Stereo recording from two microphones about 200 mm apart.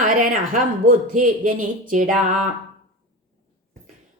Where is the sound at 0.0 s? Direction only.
40° right (ahead or behind).